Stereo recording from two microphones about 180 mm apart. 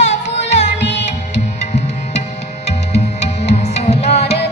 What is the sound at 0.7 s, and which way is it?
Music, 75° left (ahead or behind).